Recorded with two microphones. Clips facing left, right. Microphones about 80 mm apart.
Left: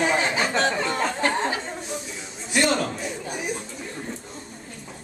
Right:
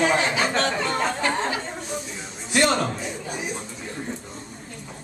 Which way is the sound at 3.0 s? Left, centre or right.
Centre.